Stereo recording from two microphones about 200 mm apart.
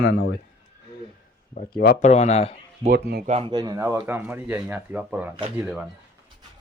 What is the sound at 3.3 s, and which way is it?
Speech, 25° right (ahead or behind).